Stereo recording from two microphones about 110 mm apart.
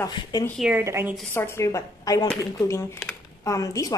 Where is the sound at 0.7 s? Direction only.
25° right (ahead or behind).